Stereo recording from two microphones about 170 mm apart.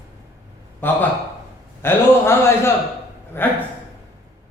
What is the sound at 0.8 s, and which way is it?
Speech, 10° left (ahead or behind).